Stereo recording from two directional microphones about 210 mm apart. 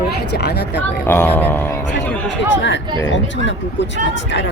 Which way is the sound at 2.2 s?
60° left (ahead or behind).